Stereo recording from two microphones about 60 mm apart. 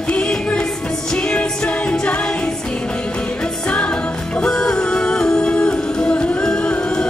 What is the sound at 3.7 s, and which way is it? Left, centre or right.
Music, centre.